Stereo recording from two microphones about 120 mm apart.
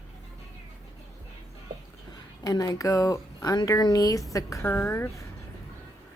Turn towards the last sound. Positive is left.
turn(degrees=20)  # may be behind; listen again after turning